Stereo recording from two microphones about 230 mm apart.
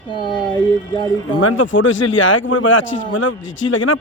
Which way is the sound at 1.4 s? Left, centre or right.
Left.